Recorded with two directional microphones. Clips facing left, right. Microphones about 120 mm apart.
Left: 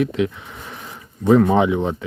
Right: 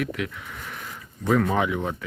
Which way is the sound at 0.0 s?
25° left (ahead or behind).